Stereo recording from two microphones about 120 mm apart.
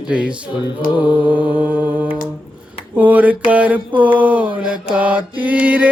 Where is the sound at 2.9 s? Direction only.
15° right (ahead or behind).